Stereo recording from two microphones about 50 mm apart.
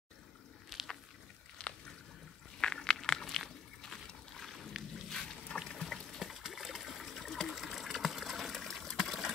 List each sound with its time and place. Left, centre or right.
0.7 s a sound: centre
1.6 s boat: left
2.6 s biting: centre
4.4 s boat: centre
5.1 s boat: centre
6.0 s water: centre